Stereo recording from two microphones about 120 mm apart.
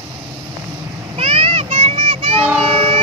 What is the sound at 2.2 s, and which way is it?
Train, 55° right (ahead or behind).